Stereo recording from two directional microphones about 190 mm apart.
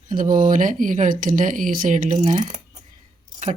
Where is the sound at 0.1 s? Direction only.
45° right (ahead or behind).